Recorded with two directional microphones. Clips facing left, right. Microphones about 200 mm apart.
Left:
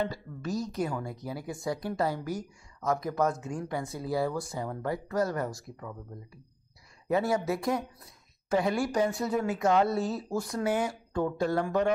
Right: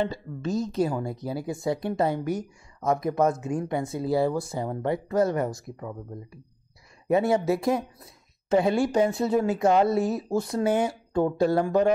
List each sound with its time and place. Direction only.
0.0 s a woman's voice: 25° right (ahead or behind)
7.1 s a woman's voice: 25° right (ahead or behind)